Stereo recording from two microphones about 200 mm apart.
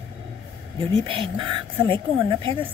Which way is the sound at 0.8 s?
25° right (ahead or behind).